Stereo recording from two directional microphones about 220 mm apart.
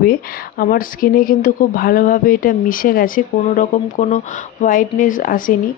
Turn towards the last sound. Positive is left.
turn(degrees=40)  # may be behind; listen again after turning